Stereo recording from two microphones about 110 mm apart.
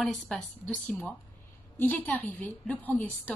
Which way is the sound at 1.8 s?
15° left (ahead or behind).